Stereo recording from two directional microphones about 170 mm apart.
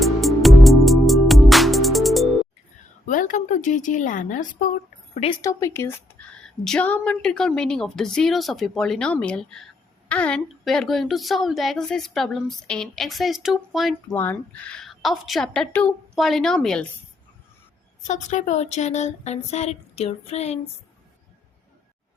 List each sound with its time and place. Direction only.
0.0 s music: centre (ahead or behind)
3.1 s speech: 50° left (ahead or behind)
5.3 s a woman's voice: 20° left (ahead or behind); by 13.9 s centre (ahead or behind)
14.1 s a woman's voice: 10° left (ahead or behind)
18.0 s speech: 45° left (ahead or behind)